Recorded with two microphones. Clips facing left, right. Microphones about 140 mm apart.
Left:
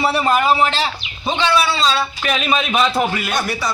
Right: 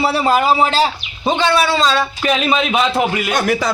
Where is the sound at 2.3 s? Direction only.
25° right (ahead or behind).